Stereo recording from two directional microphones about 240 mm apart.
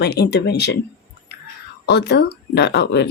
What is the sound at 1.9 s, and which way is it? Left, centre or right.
Speech, left.